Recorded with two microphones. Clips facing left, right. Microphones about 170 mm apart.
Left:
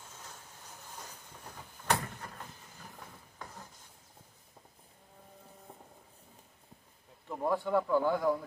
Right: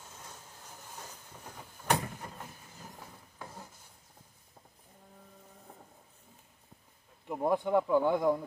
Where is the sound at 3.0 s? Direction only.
10° right (ahead or behind).